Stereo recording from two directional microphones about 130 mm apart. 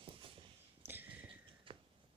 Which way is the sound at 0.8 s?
15° right (ahead or behind).